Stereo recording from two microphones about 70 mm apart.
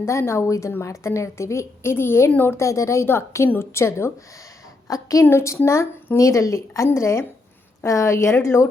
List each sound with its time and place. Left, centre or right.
0.0 s a woman's voice: left
2.6 s a woman's voice: left
4.9 s a woman's voice: left
5.2 s a woman's voice: left
6.1 s a woman's voice: left